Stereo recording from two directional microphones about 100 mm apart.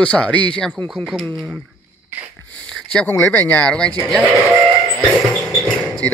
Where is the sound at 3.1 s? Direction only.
20° left (ahead or behind).